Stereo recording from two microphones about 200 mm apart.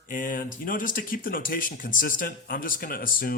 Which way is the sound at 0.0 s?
40° left (ahead or behind).